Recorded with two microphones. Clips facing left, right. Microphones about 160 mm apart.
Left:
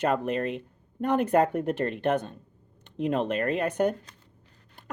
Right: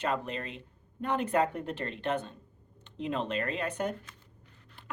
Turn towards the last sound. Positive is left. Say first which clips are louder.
# left 8 dB
turn(degrees=45)  # may be behind; listen again after turning